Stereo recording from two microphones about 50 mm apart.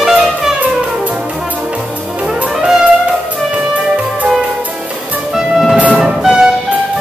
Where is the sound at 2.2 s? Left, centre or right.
Right.